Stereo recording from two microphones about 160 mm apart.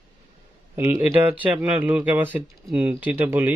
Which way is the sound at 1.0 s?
10° right (ahead or behind).